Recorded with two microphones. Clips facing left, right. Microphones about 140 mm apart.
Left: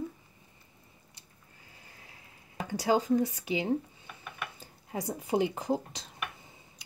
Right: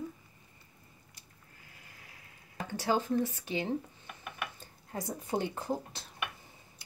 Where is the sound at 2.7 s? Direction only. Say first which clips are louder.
Left 4 dB; 15° left (ahead or behind).